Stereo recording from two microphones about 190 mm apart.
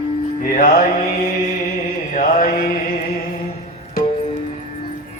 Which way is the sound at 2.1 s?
50° left (ahead or behind).